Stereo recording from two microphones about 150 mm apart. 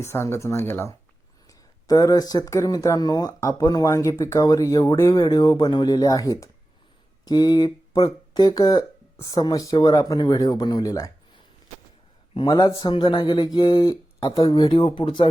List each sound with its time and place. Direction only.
0.0 s speech: 15° left (ahead or behind)
12.3 s speech: 35° left (ahead or behind)